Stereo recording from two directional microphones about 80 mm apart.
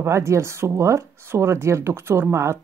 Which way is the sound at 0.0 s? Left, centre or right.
Right.